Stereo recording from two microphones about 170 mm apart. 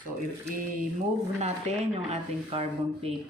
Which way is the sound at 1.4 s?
40° right (ahead or behind).